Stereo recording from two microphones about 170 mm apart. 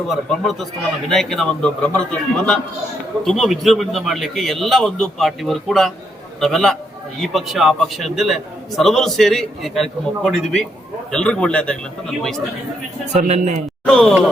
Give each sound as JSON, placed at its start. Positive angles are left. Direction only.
{"t": 0.1, "sound": "a man's voice", "side_deg": 0}
{"t": 13.1, "sound": "a man's voice", "side_deg": -40}
{"t": 13.8, "sound": "a man's voice", "side_deg": 5}